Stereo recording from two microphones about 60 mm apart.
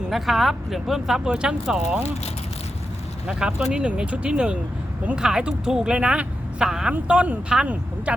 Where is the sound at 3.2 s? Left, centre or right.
Centre.